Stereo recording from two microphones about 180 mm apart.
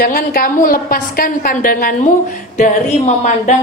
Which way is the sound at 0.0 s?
55° left (ahead or behind).